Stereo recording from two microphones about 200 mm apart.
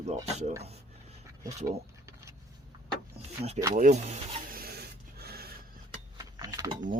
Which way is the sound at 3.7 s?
40° right (ahead or behind).